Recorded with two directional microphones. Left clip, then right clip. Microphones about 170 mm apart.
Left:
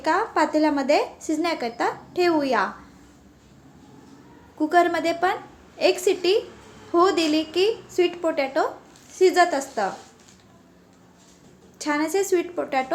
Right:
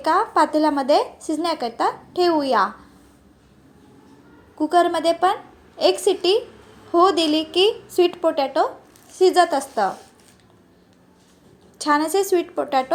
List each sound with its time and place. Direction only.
0.0 s a woman's voice: 15° right (ahead or behind)
4.5 s a woman's voice: 15° right (ahead or behind)
11.8 s a woman's voice: 20° right (ahead or behind)